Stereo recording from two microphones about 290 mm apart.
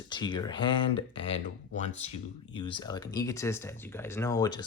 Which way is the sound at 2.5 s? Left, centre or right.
Centre.